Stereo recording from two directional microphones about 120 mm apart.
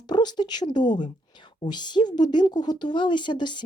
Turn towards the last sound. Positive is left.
turn(degrees=40)  # may be behind; listen again after turning